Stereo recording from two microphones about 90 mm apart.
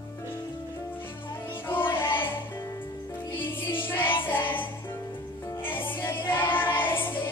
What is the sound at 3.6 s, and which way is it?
Music, 25° left (ahead or behind).